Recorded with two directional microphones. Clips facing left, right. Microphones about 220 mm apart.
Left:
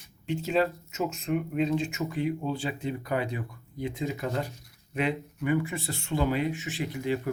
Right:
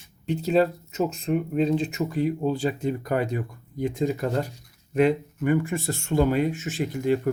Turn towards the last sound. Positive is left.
turn(degrees=-45)  # may be behind; listen again after turning